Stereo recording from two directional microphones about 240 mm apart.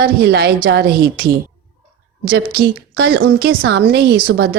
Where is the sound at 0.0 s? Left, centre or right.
Right.